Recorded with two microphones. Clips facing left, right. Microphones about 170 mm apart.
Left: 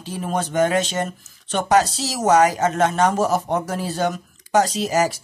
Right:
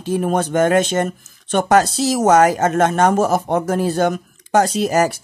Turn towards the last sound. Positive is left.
turn(degrees=-55)  # may be behind; listen again after turning